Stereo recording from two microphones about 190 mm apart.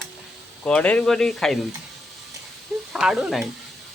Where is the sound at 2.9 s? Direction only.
5° right (ahead or behind).